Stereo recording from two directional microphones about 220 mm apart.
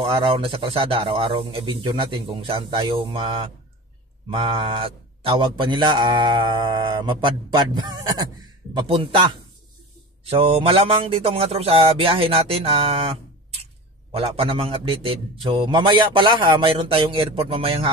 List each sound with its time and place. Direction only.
0.1 s speech: 25° right (ahead or behind)